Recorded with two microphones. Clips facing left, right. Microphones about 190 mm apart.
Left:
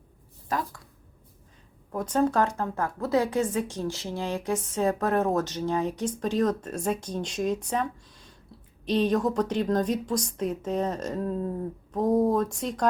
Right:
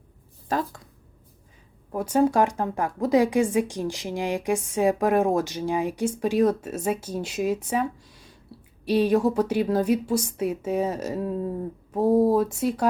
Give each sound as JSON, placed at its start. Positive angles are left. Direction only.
{"t": 0.4, "sound": "speech", "side_deg": -30}
{"t": 1.9, "sound": "a woman's voice", "side_deg": -10}